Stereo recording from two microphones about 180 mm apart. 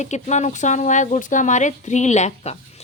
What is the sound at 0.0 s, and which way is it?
Speech, 40° left (ahead or behind).